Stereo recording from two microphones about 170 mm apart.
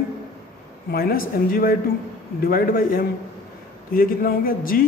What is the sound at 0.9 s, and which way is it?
Speech, 60° left (ahead or behind).